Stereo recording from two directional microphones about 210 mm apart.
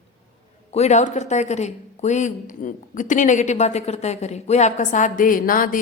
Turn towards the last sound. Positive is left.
turn(degrees=40)  # may be behind; listen again after turning